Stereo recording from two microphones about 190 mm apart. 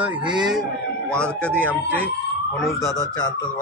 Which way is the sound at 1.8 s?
10° right (ahead or behind).